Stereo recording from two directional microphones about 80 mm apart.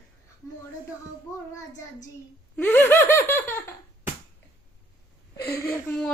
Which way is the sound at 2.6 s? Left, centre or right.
Left.